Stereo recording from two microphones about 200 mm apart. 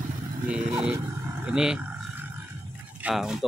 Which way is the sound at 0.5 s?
5° right (ahead or behind).